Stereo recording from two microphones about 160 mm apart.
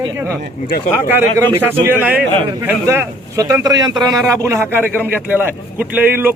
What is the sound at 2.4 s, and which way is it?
Speech, 25° right (ahead or behind).